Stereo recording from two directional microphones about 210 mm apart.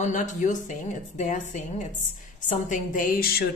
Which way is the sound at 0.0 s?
40° left (ahead or behind).